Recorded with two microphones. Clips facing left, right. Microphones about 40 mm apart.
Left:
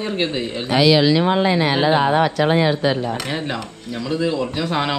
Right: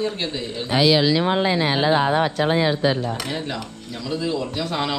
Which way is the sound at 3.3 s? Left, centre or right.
Left.